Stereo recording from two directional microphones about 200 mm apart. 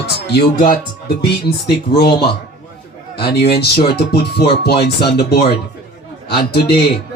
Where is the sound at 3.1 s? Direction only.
55° left (ahead or behind).